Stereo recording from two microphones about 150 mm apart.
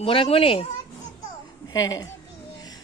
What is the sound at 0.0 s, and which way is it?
Speech, 40° left (ahead or behind).